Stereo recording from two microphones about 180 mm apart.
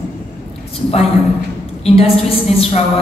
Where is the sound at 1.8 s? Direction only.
35° left (ahead or behind).